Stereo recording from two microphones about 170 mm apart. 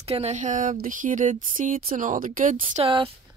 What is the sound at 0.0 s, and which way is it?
Speech, 40° right (ahead or behind).